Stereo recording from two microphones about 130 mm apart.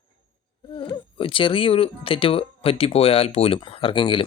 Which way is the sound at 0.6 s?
40° left (ahead or behind).